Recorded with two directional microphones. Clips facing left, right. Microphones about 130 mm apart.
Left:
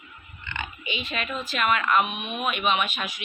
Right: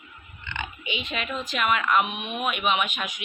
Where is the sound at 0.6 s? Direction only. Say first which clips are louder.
Right 1 dB; 15° right (ahead or behind).